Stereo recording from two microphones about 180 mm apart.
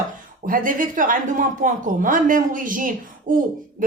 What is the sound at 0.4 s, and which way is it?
A woman's voice, 50° right (ahead or behind).